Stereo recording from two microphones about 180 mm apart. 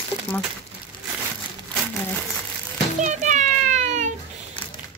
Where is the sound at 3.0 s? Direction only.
40° right (ahead or behind).